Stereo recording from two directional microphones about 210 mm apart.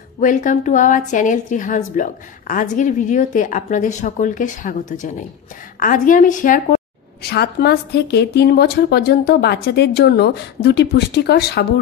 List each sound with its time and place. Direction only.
0.2 s a woman's voice: 35° left (ahead or behind)
7.2 s a woman's voice: 50° left (ahead or behind)